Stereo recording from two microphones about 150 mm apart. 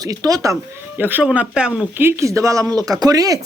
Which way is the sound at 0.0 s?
25° right (ahead or behind).